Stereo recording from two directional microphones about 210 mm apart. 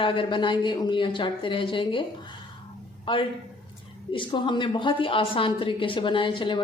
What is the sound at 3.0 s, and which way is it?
A man's voice, 25° left (ahead or behind).